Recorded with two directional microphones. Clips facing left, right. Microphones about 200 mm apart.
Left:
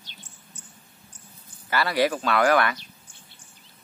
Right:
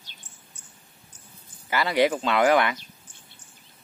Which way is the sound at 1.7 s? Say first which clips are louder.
Right 1 dB; 20° right (ahead or behind).